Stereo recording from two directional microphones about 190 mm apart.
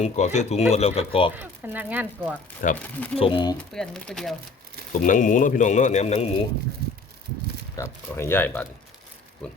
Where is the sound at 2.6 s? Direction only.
45° left (ahead or behind).